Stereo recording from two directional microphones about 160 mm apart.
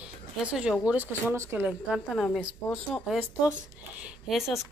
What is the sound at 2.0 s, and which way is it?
A woman's voice, 5° left (ahead or behind).